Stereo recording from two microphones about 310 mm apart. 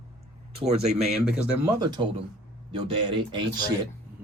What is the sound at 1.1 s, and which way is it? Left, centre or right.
Speech, centre.